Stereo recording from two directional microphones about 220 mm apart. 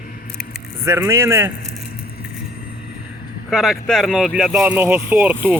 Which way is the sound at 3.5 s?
Centre (ahead or behind).